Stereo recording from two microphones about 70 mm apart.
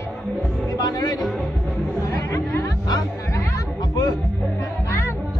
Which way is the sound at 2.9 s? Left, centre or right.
Left.